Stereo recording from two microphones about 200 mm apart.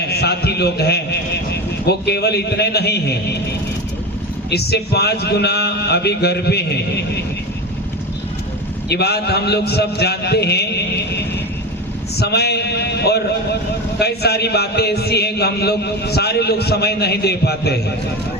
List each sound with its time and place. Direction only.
0.0 s a man's voice: 55° left (ahead or behind)
4.4 s a man's voice: 55° left (ahead or behind)
8.9 s a man's voice: 55° left (ahead or behind)